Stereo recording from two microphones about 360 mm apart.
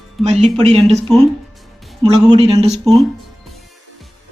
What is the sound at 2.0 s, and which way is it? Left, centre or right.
Speech, centre.